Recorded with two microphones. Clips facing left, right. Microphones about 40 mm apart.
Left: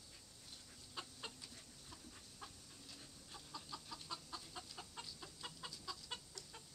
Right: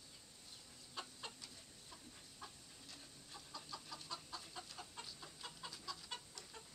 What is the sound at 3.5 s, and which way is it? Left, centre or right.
Chicken, centre.